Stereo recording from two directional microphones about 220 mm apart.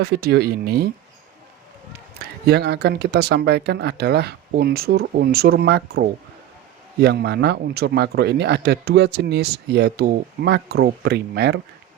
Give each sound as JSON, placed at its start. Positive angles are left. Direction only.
{"t": 0.0, "sound": "speech", "side_deg": -45}
{"t": 2.1, "sound": "speech", "side_deg": -45}